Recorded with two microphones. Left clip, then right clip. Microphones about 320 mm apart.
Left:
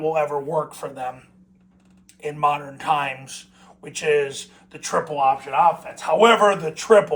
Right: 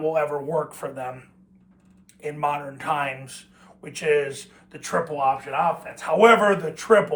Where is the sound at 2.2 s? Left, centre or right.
Centre.